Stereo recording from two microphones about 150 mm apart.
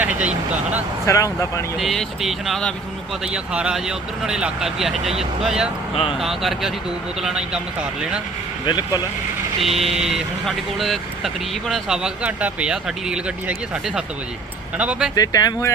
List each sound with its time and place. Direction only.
0.0 s speech: 10° right (ahead or behind)
1.0 s speech: 20° left (ahead or behind)
1.8 s speech: centre (ahead or behind)
5.9 s speech: 40° left (ahead or behind)
6.1 s speech: centre (ahead or behind)
8.6 s speech: 25° left (ahead or behind)
9.6 s speech: 40° right (ahead or behind)
10.0 s speech: centre (ahead or behind)
14.8 s speech: 5° right (ahead or behind)
15.1 s speech: 25° left (ahead or behind)